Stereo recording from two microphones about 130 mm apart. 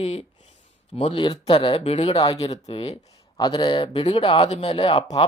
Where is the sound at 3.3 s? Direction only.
35° left (ahead or behind).